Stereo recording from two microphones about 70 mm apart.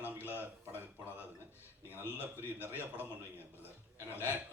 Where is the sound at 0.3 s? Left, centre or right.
Right.